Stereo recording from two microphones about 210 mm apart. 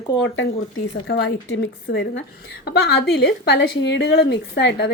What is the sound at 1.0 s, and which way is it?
A woman's voice, 55° left (ahead or behind).